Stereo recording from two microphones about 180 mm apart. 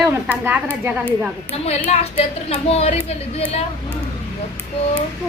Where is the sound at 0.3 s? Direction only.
10° right (ahead or behind).